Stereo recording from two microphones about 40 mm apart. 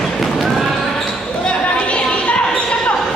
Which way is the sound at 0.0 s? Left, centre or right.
Centre.